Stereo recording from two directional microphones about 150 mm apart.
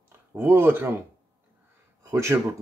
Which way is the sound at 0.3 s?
15° right (ahead or behind).